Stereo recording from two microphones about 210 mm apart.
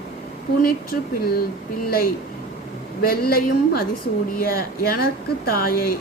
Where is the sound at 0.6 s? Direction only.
45° left (ahead or behind).